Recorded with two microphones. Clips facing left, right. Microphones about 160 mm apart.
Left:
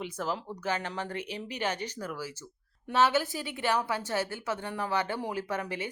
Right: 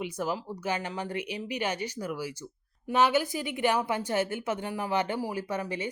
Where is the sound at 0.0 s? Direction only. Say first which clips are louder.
Right 2 dB; 10° right (ahead or behind).